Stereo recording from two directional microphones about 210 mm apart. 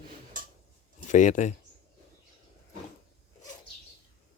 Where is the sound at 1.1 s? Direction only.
35° left (ahead or behind).